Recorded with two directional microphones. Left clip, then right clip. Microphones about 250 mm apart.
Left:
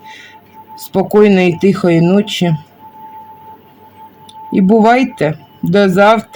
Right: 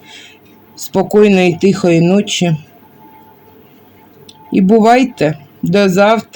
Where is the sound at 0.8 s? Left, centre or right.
Centre.